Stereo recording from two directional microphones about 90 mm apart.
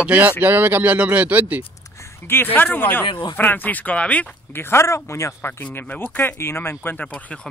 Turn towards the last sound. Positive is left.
turn(degrees=15)  # may be behind; listen again after turning